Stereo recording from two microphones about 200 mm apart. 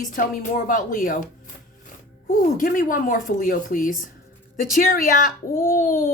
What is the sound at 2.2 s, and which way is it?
A woman's voice, 45° left (ahead or behind).